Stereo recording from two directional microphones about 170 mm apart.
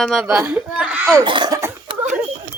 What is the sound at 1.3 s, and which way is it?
Cough, 25° right (ahead or behind).